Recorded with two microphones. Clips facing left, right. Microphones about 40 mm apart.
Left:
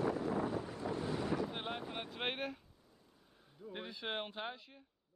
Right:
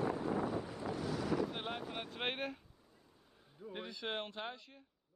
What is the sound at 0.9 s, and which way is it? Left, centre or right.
Wind noise, left.